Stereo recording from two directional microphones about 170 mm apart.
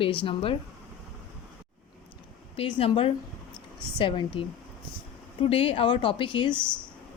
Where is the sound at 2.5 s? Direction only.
35° left (ahead or behind).